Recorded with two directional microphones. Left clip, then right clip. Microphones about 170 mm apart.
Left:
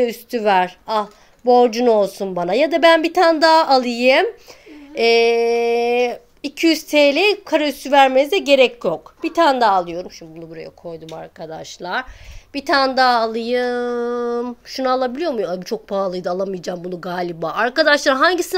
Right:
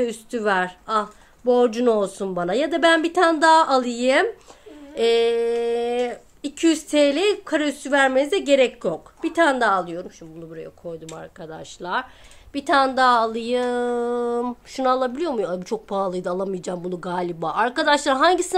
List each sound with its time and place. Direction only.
0.0 s speech: 5° left (ahead or behind)